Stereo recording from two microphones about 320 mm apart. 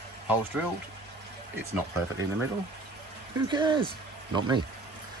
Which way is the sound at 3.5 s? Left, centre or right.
Centre.